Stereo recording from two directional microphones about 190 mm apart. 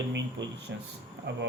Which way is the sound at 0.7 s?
65° right (ahead or behind).